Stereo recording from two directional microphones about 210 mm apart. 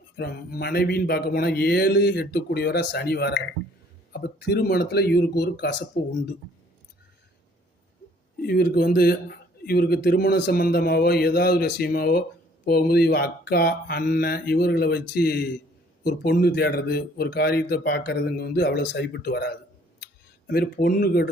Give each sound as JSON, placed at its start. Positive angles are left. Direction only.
{"t": 0.2, "sound": "a man's voice", "side_deg": 50}
{"t": 8.4, "sound": "a man's voice", "side_deg": 45}